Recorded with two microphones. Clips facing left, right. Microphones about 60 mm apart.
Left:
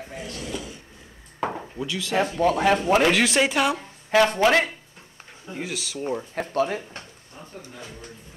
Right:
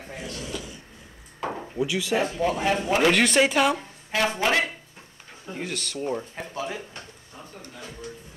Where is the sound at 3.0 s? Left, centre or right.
Centre.